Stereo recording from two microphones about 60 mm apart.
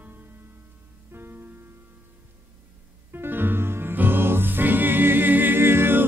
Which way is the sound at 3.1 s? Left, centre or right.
Right.